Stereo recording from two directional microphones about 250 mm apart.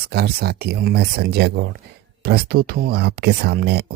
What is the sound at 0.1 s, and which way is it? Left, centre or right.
Speech, right.